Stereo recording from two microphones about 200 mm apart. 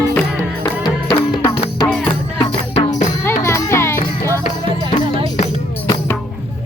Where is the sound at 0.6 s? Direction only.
20° left (ahead or behind).